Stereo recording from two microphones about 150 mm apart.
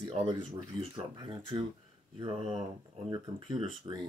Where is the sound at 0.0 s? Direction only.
35° right (ahead or behind).